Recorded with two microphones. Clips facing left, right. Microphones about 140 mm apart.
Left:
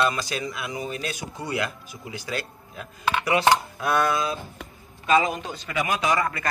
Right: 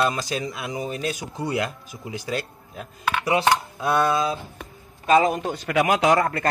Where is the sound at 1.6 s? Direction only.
35° right (ahead or behind).